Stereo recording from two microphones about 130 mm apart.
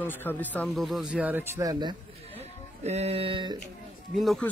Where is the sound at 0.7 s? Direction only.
5° right (ahead or behind).